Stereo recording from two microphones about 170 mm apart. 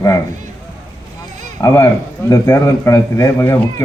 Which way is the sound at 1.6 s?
15° left (ahead or behind).